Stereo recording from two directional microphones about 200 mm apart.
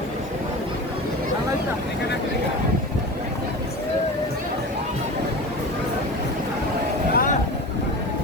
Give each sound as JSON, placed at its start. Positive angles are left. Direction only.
{"t": 7.1, "sound": "boat", "side_deg": 45}